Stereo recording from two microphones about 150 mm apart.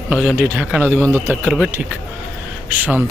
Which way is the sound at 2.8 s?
10° right (ahead or behind).